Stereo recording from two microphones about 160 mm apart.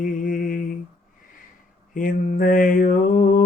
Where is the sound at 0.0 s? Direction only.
60° left (ahead or behind).